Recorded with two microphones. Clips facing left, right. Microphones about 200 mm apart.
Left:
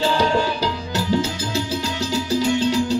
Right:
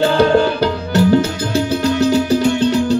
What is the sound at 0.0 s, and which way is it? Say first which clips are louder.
Music: right 7 dB; 60° right (ahead or behind).